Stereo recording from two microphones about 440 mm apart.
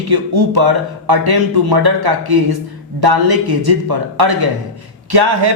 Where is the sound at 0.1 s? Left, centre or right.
Right.